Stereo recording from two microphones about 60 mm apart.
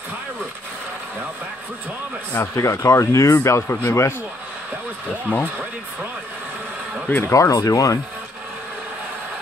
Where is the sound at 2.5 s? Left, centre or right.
Left.